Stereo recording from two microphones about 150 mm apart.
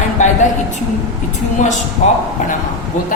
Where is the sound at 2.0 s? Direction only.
50° left (ahead or behind).